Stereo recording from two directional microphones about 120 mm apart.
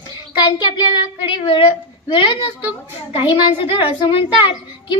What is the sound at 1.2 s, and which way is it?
A child's voice, 45° left (ahead or behind).